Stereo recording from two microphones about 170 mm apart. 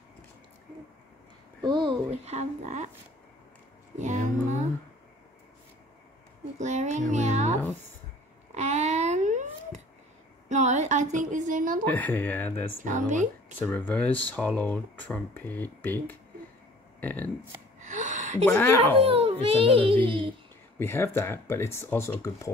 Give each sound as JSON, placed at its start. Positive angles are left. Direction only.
{"t": 1.6, "sound": "speech", "side_deg": -25}
{"t": 2.0, "sound": "a child's voice", "side_deg": -40}
{"t": 3.9, "sound": "music", "side_deg": -45}
{"t": 6.6, "sound": "a child's voice", "side_deg": -45}
{"t": 8.5, "sound": "a sound", "side_deg": -40}
{"t": 10.5, "sound": "a woman's voice", "side_deg": -45}
{"t": 11.9, "sound": "speech", "side_deg": 10}
{"t": 12.8, "sound": "speech", "side_deg": -45}
{"t": 13.6, "sound": "speech", "side_deg": 10}
{"t": 17.7, "sound": "a sound", "side_deg": -45}
{"t": 18.4, "sound": "speech", "side_deg": 10}
{"t": 18.9, "sound": "a child's voice", "side_deg": -35}
{"t": 20.8, "sound": "speech", "side_deg": 15}